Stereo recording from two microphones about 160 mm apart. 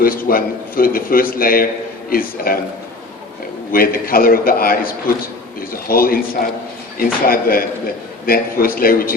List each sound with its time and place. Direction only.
0.0 s a man's voice: 65° left (ahead or behind)
3.7 s a man's voice: 65° left (ahead or behind)